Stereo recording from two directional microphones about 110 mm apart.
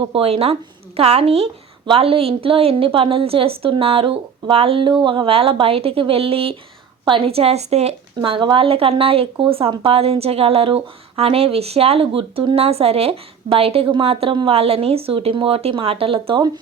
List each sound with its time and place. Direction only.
0.0 s a woman's voice: 60° right (ahead or behind); by 7.9 s 75° right (ahead or behind)
8.2 s a woman's voice: 50° right (ahead or behind)
12.5 s a woman's voice: 65° right (ahead or behind)